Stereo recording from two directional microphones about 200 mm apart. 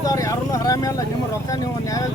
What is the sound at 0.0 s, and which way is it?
Vehicle, 15° left (ahead or behind).